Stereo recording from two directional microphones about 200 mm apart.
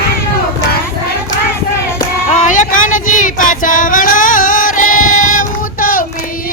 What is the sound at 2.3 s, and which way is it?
Child singing, 40° left (ahead or behind).